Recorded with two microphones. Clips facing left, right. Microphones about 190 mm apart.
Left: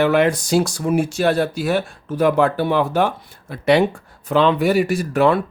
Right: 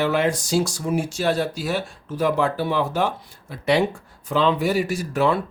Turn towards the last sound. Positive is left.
turn(degrees=60)  # may be behind; listen again after turning